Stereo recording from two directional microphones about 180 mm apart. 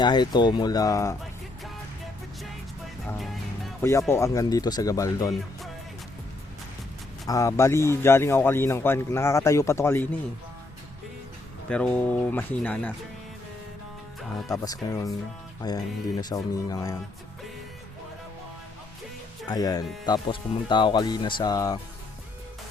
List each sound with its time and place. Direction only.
0.0 s speech: 25° left (ahead or behind)
3.1 s music: centre (ahead or behind)
3.8 s speech: 15° left (ahead or behind)
7.3 s speech: 20° left (ahead or behind)
11.7 s speech: 5° left (ahead or behind)
14.2 s speech: centre (ahead or behind)
14.5 s speech: 20° left (ahead or behind)
19.5 s speech: 20° left (ahead or behind)